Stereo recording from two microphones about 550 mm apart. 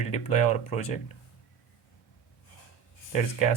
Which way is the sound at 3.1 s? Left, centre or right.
Left.